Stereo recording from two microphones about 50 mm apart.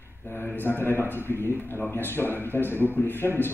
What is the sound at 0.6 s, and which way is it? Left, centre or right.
Speech, left.